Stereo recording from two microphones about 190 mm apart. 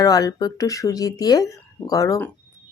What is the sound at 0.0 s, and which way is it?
A woman's voice, 20° left (ahead or behind).